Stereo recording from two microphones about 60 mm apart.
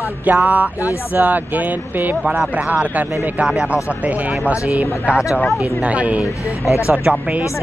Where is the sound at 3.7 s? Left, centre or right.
Right.